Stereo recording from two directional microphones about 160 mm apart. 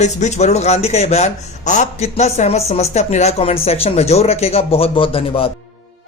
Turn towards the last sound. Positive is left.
turn(degrees=35)  # may be behind; listen again after turning